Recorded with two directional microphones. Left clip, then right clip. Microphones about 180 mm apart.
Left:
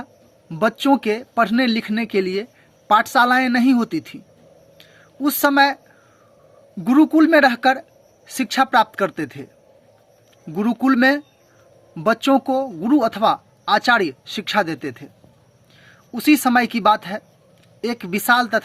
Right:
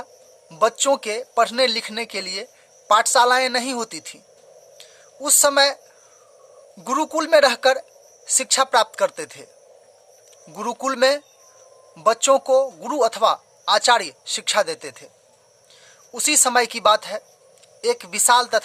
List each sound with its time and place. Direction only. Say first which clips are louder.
0.0 s speech: even; 20° right (ahead or behind)
4.8 s a sound: left 6 dB; 15° right (ahead or behind)
6.8 s a woman's voice: left 7 dB; 15° right (ahead or behind)
10.5 s a woman's voice: left 5 dB; 15° right (ahead or behind)
16.1 s speech: left 2 dB; 20° right (ahead or behind)